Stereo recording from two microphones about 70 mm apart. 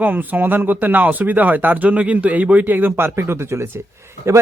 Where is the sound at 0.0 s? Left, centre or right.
Right.